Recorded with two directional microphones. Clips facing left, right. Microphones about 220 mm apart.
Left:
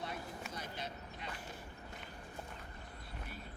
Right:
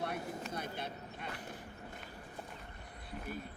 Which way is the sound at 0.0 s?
60° right (ahead or behind).